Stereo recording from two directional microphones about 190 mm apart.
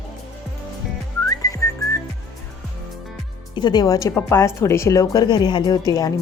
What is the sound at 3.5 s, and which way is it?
A woman's voice, 25° left (ahead or behind).